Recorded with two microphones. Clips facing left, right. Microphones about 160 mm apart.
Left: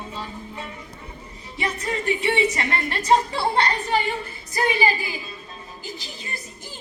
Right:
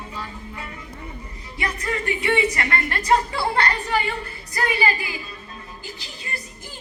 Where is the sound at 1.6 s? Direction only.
25° left (ahead or behind).